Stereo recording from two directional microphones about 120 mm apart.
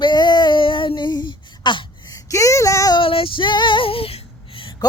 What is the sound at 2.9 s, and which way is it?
Female singing, 50° left (ahead or behind).